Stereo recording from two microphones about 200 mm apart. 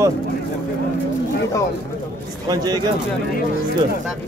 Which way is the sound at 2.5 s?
20° right (ahead or behind).